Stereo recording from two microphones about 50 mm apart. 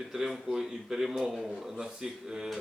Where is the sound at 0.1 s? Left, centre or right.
Centre.